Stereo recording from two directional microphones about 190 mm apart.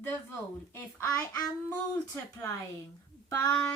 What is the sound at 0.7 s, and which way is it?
A woman's voice, 10° left (ahead or behind).